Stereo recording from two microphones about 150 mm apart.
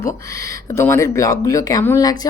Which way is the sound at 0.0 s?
20° left (ahead or behind).